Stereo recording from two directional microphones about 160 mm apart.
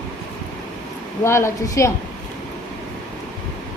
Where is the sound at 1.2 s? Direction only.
15° left (ahead or behind).